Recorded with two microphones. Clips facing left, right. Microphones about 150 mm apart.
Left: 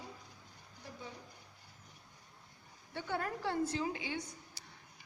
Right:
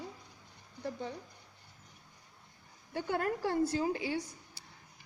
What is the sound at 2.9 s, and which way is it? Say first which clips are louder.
A woman's voice: right 5 dB; 40° right (ahead or behind).